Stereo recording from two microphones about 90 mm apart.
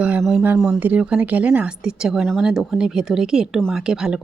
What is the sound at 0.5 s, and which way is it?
Speech, 5° right (ahead or behind).